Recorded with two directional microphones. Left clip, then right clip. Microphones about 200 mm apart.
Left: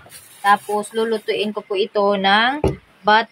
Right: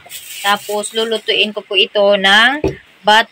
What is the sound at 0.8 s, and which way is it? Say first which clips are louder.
Speech: right 3 dB; 15° left (ahead or behind).